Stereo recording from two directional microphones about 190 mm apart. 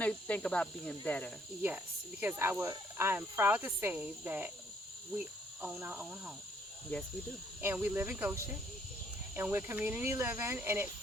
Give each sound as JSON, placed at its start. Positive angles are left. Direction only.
{"t": 0.0, "sound": "speech", "side_deg": 5}
{"t": 2.2, "sound": "speech", "side_deg": -10}
{"t": 5.6, "sound": "speech", "side_deg": -5}
{"t": 7.6, "sound": "speech", "side_deg": -10}
{"t": 9.3, "sound": "speech", "side_deg": -10}